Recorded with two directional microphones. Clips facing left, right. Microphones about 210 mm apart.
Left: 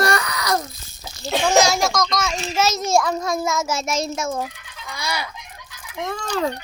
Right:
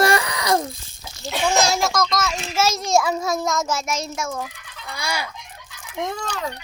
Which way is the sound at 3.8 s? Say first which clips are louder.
Left 3 dB; 30° left (ahead or behind).